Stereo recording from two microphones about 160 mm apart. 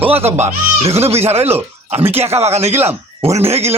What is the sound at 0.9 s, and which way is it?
Speech, 40° right (ahead or behind).